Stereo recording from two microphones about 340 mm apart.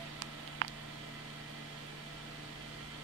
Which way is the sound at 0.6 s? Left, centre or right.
Right.